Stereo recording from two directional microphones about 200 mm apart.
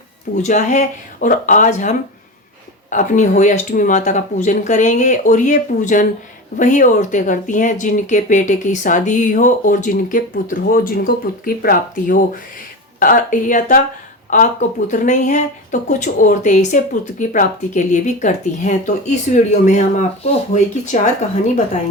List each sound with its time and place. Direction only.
0.4 s speech: 35° left (ahead or behind)